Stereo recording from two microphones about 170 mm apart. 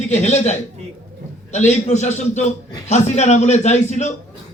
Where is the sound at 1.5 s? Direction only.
40° left (ahead or behind).